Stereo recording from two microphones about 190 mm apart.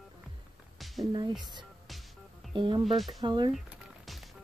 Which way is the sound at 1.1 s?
25° right (ahead or behind).